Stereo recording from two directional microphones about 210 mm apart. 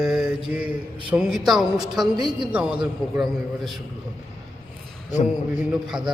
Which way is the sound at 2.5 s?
5° right (ahead or behind).